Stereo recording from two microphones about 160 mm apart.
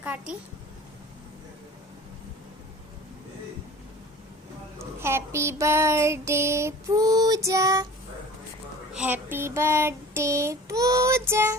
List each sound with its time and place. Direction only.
0.0 s a child's voice: 10° right (ahead or behind)
4.8 s child singing: 15° right (ahead or behind)
8.9 s child singing: 10° right (ahead or behind)